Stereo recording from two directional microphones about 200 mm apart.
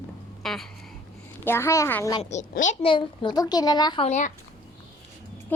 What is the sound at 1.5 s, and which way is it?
Speech, 15° left (ahead or behind).